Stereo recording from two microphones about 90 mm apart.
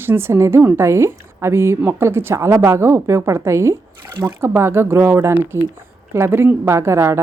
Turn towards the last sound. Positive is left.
turn(degrees=-30)  # may be behind; listen again after turning